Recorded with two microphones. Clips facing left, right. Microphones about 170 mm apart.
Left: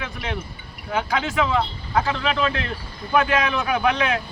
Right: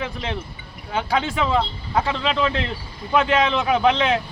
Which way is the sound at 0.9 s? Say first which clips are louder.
Even; 30° right (ahead or behind).